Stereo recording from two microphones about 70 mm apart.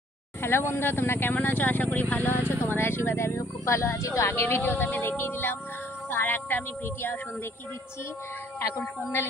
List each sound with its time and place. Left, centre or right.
0.4 s speech: left
4.3 s speech: left
8.5 s speech: left